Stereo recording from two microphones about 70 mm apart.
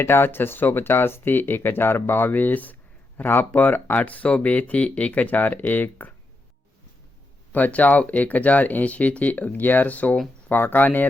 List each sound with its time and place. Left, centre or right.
0.0 s speech: left
7.5 s speech: left